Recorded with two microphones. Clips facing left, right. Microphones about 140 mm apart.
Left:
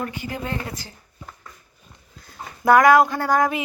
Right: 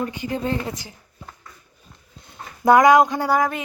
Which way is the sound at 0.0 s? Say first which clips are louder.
Right 4 dB; 20° right (ahead or behind).